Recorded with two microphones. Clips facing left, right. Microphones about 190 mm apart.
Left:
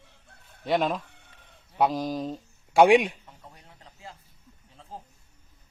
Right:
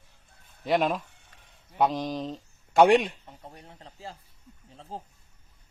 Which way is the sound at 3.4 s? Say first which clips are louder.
Right 5 dB; 35° right (ahead or behind).